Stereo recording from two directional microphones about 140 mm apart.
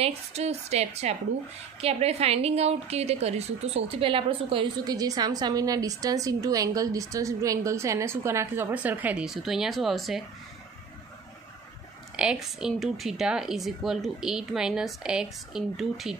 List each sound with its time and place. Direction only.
0.0 s a woman's voice: 50° right (ahead or behind)
4.9 s a woman's voice: 25° right (ahead or behind); by 10.2 s centre (ahead or behind)
12.2 s a woman's voice: 5° right (ahead or behind)